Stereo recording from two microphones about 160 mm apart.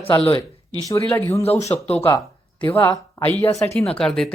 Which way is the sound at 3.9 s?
5° left (ahead or behind).